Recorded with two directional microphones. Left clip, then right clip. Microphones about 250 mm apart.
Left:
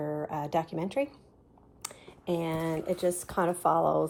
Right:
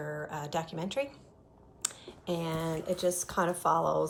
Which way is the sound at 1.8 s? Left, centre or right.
Centre.